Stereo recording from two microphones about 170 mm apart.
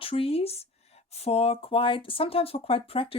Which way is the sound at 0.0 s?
35° left (ahead or behind).